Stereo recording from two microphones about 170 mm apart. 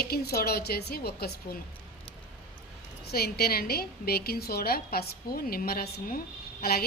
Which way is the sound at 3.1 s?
65° left (ahead or behind).